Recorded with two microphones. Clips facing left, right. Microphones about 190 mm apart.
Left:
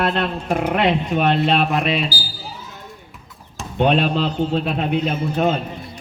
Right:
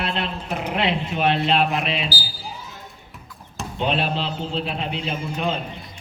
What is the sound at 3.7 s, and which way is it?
Speech, 50° left (ahead or behind).